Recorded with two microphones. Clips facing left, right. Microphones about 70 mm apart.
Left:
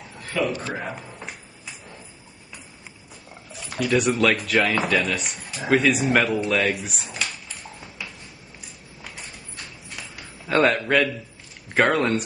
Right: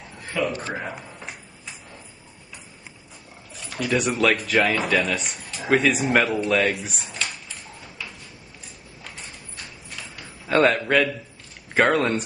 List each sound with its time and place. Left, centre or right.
0.3 s a man's voice: centre
3.7 s speech: centre
10.1 s a sound: centre
11.7 s speech: centre